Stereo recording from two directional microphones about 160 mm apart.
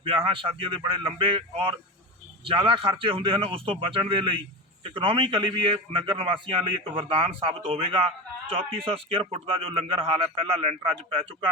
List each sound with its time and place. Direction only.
0.0 s a man's voice: 35° right (ahead or behind)